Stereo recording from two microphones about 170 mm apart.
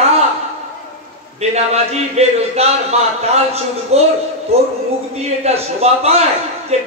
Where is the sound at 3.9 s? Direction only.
35° right (ahead or behind).